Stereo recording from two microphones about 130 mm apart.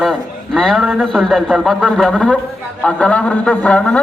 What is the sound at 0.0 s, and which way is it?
A man's voice, centre (ahead or behind).